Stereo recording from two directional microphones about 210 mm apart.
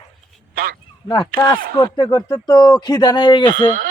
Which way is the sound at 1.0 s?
20° left (ahead or behind).